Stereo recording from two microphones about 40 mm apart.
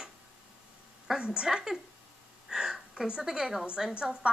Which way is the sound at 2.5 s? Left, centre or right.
Centre.